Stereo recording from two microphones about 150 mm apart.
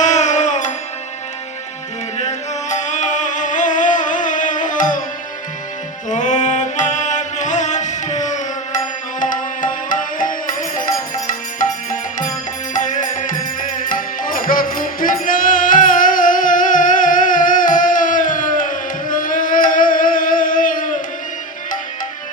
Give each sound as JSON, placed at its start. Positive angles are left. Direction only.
{"t": 0.0, "sound": "music", "side_deg": 50}
{"t": 2.1, "sound": "music", "side_deg": 50}
{"t": 6.1, "sound": "music", "side_deg": 55}